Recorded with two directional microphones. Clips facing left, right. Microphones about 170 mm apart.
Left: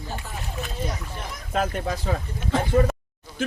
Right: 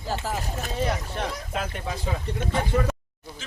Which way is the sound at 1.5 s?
45° left (ahead or behind).